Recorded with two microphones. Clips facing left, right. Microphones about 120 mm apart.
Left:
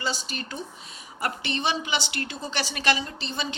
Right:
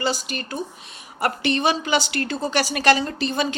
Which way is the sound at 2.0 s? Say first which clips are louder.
Right 7 dB; 20° left (ahead or behind).